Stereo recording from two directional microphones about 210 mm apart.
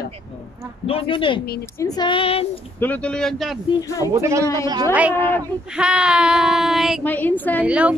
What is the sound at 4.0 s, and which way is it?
Speech, 15° right (ahead or behind).